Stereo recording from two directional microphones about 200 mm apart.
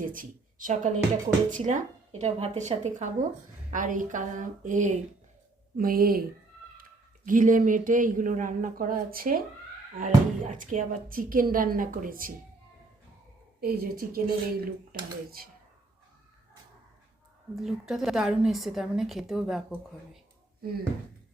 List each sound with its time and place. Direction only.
0.0 s a man's voice: 45° right (ahead or behind)
7.3 s a man's voice: 40° right (ahead or behind)
13.6 s speech: 50° right (ahead or behind)
17.6 s a woman's voice: centre (ahead or behind)